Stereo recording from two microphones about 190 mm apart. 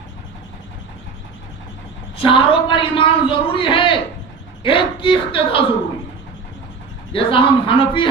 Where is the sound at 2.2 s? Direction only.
25° left (ahead or behind).